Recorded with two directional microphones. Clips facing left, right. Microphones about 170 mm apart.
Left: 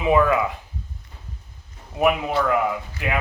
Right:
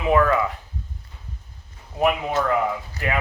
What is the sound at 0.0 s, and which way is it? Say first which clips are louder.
Speech: left 1 dB; 10° left (ahead or behind).